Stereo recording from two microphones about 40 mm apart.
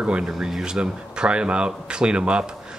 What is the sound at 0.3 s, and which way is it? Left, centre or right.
Speech, centre.